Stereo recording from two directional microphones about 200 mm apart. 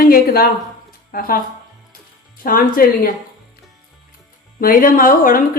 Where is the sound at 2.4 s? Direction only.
45° left (ahead or behind).